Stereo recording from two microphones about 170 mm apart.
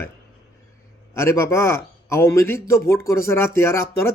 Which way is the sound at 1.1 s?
15° left (ahead or behind).